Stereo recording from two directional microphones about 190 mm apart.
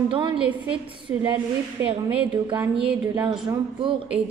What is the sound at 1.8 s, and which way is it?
Speech, 30° right (ahead or behind).